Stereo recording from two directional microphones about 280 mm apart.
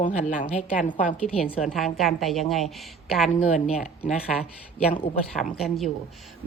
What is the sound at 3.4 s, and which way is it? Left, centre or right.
Speech, left.